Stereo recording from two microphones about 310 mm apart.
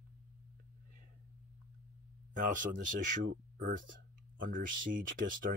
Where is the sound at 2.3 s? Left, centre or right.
Right.